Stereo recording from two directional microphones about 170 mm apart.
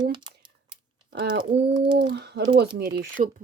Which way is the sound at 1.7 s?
80° right.